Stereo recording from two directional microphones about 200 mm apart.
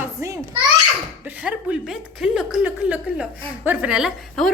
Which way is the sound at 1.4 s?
5° right (ahead or behind).